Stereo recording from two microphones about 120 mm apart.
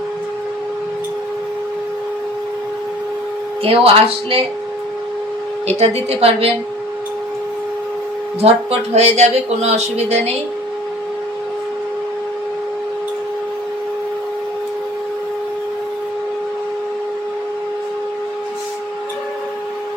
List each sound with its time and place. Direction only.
3.6 s speech: 50° right (ahead or behind)
5.6 s speech: 60° right (ahead or behind)
8.4 s speech: 60° right (ahead or behind)